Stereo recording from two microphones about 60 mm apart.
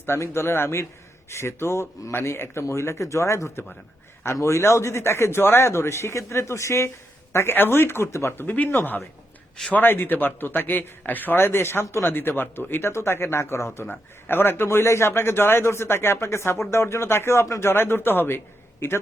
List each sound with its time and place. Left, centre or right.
0.0 s a man's voice: left
7.3 s a man's voice: left
8.3 s a man's voice: left
12.0 s a man's voice: left
14.3 s a man's voice: left